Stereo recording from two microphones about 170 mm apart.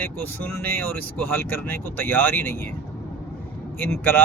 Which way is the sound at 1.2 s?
10° left (ahead or behind).